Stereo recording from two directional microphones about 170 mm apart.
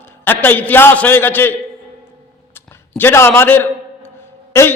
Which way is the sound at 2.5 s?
15° left (ahead or behind).